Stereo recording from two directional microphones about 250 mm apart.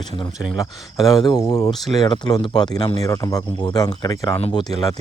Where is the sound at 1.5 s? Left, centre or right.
Centre.